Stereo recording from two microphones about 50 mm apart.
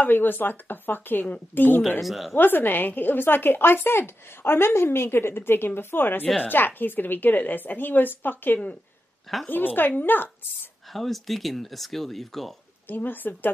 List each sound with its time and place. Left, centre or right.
0.0 s a woman's voice: left
2.0 s speech: centre
2.3 s a woman's voice: left
9.3 s speech: centre
9.8 s a woman's voice: left
10.9 s speech: centre
12.8 s a woman's voice: left